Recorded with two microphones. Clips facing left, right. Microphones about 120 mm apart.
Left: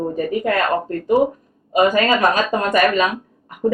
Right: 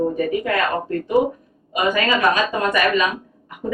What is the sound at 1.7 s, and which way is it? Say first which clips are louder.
Speech: left 4 dB; 40° left (ahead or behind).